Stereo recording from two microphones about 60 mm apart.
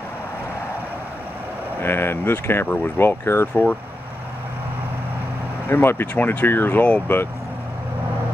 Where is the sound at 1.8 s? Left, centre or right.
Left.